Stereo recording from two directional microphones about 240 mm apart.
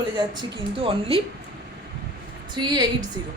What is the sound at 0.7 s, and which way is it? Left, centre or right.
Speech, right.